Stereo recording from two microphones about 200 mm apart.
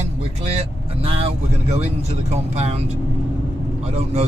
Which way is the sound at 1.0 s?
30° right (ahead or behind).